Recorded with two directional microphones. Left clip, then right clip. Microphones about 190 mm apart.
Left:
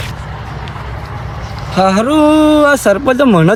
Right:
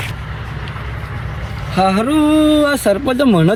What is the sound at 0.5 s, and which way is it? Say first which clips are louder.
Vehicle: left 3 dB; 40° left (ahead or behind).